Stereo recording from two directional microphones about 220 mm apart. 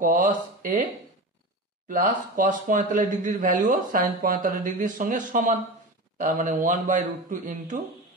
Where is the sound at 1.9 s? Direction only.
40° right (ahead or behind).